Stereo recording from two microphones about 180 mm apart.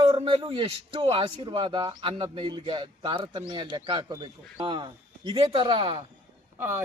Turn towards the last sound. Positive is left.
turn(degrees=-15)  # may be behind; listen again after turning